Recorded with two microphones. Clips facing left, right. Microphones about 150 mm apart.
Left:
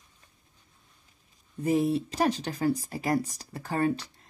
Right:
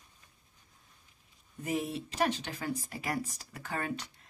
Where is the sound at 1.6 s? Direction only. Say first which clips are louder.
Left 9 dB; 35° left (ahead or behind).